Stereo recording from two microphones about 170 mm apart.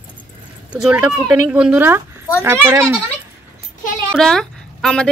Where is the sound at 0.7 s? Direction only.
5° right (ahead or behind).